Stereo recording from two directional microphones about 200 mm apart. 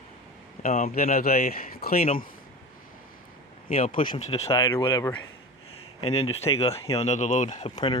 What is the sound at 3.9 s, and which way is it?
Speech, 30° left (ahead or behind).